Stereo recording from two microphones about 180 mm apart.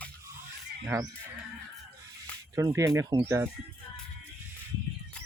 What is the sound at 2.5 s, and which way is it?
Speech, 15° right (ahead or behind).